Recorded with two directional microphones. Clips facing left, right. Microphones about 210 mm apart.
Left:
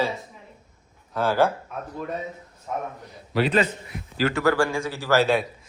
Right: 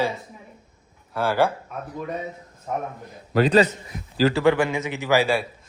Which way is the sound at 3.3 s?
45° right (ahead or behind).